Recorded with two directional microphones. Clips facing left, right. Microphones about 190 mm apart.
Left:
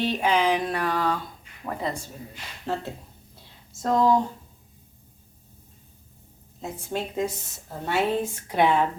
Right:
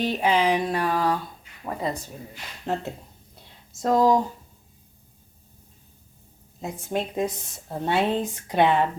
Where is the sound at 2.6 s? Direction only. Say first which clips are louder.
Right 2 dB; 20° right (ahead or behind).